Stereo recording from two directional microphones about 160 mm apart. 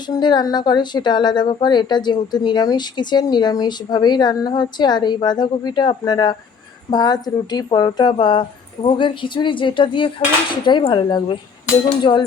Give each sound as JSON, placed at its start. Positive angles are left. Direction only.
{"t": 0.2, "sound": "speech", "side_deg": 25}